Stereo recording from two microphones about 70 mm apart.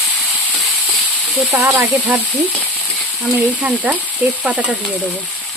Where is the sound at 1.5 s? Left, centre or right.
Right.